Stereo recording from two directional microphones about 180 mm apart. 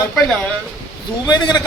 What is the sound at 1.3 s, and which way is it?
Speech, 25° left (ahead or behind).